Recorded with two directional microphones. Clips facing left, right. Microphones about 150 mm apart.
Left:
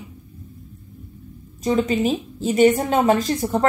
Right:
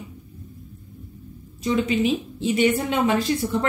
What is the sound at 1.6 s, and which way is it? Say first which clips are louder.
A woman's voice: left 2 dB; 40° left (ahead or behind).